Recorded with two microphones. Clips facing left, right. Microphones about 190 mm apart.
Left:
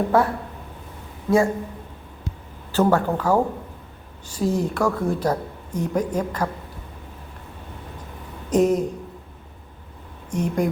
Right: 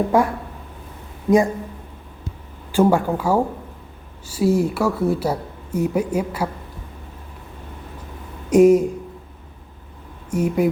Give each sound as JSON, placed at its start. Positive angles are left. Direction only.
{"t": 0.1, "sound": "a woman's voice", "side_deg": -15}
{"t": 2.7, "sound": "a woman's voice", "side_deg": -10}
{"t": 8.4, "sound": "a woman's voice", "side_deg": -10}
{"t": 10.3, "sound": "a woman's voice", "side_deg": -5}